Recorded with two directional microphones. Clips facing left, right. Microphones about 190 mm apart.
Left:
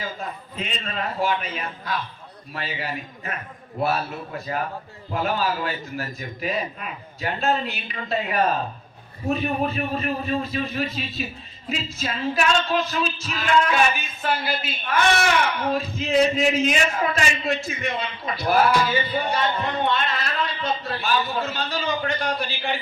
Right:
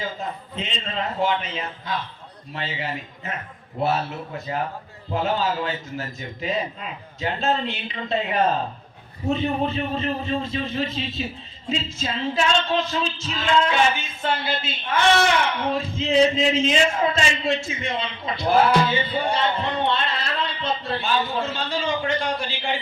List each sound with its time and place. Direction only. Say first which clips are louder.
0.0 s a man's voice: right 2 dB; 25° right (ahead or behind)